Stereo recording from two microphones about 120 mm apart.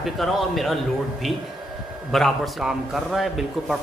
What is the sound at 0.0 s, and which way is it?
Speech, centre (ahead or behind).